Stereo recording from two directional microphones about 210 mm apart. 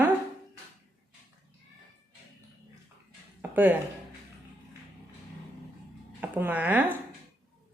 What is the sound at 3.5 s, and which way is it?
Speech, 10° right (ahead or behind).